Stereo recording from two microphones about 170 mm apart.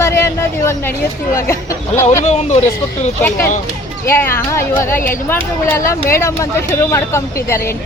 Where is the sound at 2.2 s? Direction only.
40° left (ahead or behind).